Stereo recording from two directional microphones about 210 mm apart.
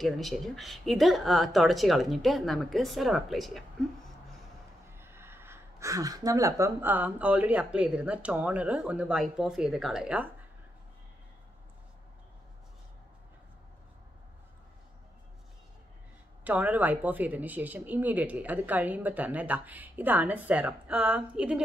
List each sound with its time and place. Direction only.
0.0 s speech: centre (ahead or behind)
4.9 s speech: 10° right (ahead or behind)
16.4 s speech: 5° right (ahead or behind)